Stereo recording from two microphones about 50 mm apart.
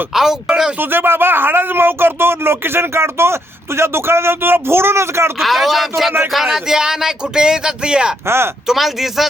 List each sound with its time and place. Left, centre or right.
0.1 s speech: centre
0.8 s a man's voice: right
5.4 s speech: centre
8.6 s speech: centre